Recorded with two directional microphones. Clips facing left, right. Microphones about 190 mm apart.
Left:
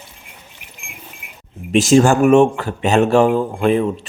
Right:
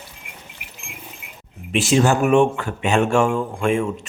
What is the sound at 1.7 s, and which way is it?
Speech, 45° left (ahead or behind).